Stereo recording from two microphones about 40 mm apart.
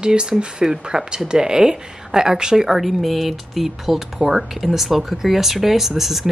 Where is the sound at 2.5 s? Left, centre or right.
Centre.